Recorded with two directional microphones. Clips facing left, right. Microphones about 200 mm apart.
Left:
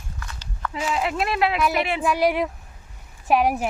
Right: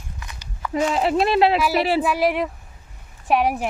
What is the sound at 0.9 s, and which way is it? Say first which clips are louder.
Speech: right 5 dB; 30° right (ahead or behind).